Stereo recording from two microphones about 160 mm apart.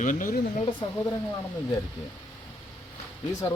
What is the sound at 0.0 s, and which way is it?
Speech, 55° left (ahead or behind).